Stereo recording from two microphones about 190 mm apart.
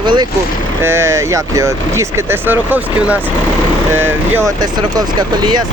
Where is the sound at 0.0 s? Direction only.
25° right (ahead or behind).